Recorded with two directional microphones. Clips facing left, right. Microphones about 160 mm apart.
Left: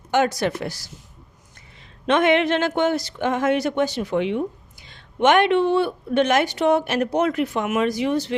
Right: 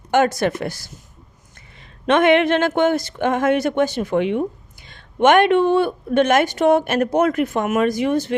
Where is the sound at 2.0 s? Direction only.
55° right (ahead or behind).